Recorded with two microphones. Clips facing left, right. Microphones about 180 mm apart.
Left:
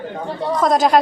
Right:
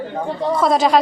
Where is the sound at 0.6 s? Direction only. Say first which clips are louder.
Left 1 dB; centre (ahead or behind).